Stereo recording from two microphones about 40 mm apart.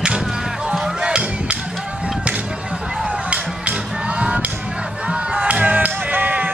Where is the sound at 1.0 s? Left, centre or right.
Right.